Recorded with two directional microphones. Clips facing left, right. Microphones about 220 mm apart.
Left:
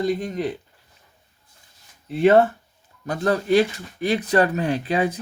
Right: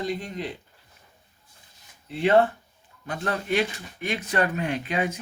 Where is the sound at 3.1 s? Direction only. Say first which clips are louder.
Left 8 dB; 35° left (ahead or behind).